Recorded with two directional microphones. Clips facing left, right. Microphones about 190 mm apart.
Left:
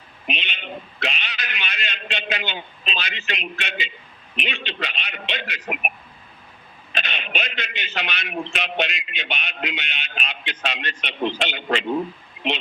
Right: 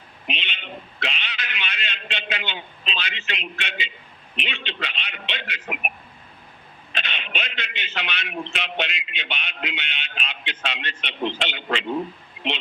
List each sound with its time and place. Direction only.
0.3 s a sound: 45° left (ahead or behind)
3.5 s a man's voice: 40° left (ahead or behind)
6.9 s a man's voice: 40° left (ahead or behind)